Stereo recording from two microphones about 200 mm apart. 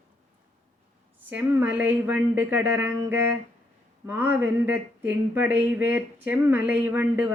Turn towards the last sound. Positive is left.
turn(degrees=-10)  # may be behind; listen again after turning